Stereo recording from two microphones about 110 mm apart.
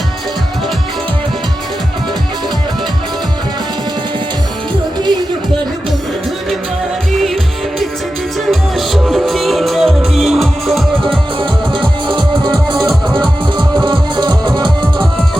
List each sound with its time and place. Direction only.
4.9 s music: 40° right (ahead or behind)
8.4 s music: centre (ahead or behind)
11.0 s music: 50° right (ahead or behind)
12.7 s music: centre (ahead or behind)
13.1 s music: 45° right (ahead or behind)